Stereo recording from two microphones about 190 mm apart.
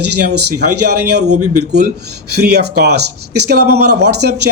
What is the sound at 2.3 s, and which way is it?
Speech, 60° right (ahead or behind).